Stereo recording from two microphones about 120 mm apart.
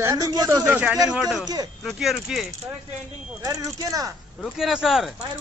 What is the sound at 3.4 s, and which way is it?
Speech, 30° right (ahead or behind).